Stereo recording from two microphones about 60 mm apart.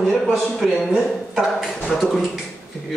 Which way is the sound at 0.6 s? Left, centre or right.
Centre.